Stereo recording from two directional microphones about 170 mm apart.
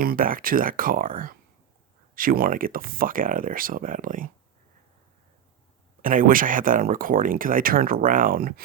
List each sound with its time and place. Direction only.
0.0 s speech: 55° right (ahead or behind)
6.0 s speech: 55° right (ahead or behind)